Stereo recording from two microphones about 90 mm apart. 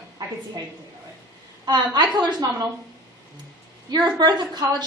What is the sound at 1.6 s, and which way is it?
A woman's voice, 50° right (ahead or behind).